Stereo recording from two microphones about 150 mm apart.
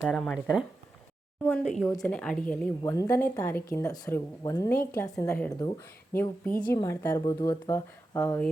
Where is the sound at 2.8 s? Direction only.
20° left (ahead or behind).